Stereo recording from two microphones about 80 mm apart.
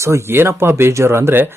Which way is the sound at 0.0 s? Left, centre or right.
Right.